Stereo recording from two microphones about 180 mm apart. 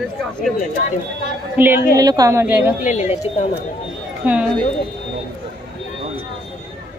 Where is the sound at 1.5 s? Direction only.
10° right (ahead or behind).